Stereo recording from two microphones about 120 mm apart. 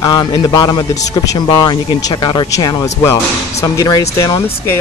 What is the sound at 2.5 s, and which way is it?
Speech, 25° left (ahead or behind).